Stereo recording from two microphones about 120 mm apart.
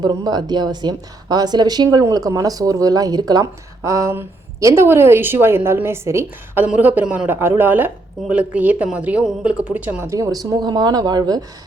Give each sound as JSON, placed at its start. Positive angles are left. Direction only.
{"t": 0.0, "sound": "a woman's voice", "side_deg": -35}
{"t": 10.1, "sound": "speech", "side_deg": -30}